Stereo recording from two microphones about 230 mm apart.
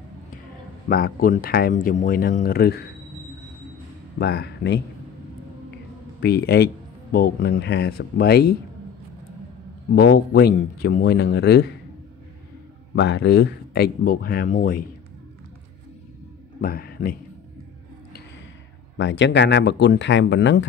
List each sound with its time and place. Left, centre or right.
0.8 s speech: left
4.2 s speech: left
6.2 s speech: left
9.9 s speech: left
12.9 s speech: left
16.6 s speech: left
18.9 s speech: left